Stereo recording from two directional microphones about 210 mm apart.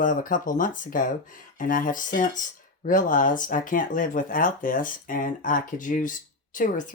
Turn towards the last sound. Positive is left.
turn(degrees=40)  # may be behind; listen again after turning